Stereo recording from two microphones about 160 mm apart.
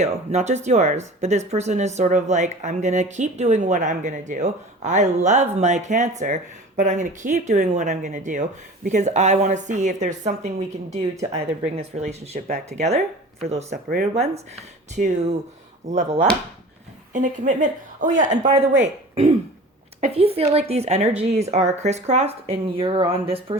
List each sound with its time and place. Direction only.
0.0 s speech: 45° right (ahead or behind)